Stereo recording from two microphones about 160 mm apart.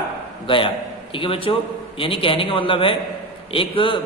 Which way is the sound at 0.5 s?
30° left (ahead or behind).